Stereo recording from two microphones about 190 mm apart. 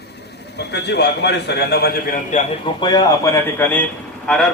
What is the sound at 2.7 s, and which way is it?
Speech, 20° left (ahead or behind).